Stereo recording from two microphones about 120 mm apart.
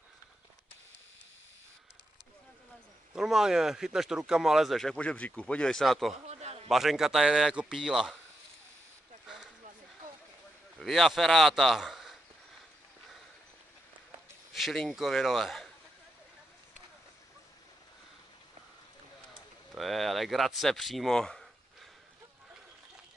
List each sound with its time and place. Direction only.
3.1 s speech: 5° right (ahead or behind)
6.2 s a sound: 65° right (ahead or behind)
6.7 s speech: centre (ahead or behind)
10.8 s speech: centre (ahead or behind)
14.5 s speech: centre (ahead or behind)
19.7 s speech: centre (ahead or behind)